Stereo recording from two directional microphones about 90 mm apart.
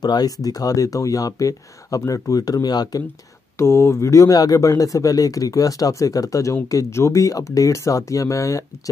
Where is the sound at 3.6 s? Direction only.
30° left (ahead or behind).